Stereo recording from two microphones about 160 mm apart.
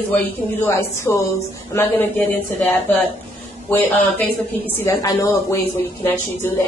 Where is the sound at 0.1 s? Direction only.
15° left (ahead or behind).